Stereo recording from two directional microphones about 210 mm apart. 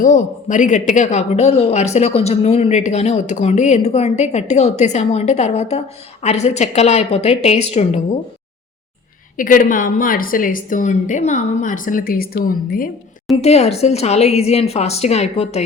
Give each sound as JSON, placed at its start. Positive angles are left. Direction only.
{"t": 0.0, "sound": "speech", "side_deg": 35}
{"t": 9.4, "sound": "speech", "side_deg": 40}
{"t": 13.4, "sound": "a woman's voice", "side_deg": 30}